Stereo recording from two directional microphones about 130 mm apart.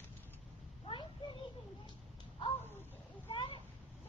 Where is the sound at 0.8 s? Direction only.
40° left (ahead or behind).